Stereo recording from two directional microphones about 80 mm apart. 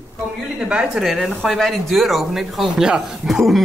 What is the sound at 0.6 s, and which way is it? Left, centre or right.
Speech, centre.